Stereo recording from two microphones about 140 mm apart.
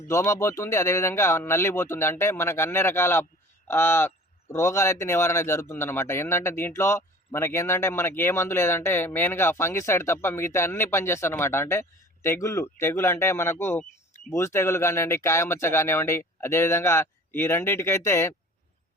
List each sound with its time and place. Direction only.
0.1 s speech: 20° left (ahead or behind)